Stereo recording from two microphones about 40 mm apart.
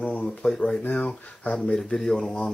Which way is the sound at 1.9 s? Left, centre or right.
Centre.